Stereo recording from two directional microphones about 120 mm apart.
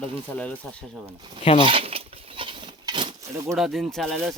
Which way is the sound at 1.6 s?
50° right (ahead or behind).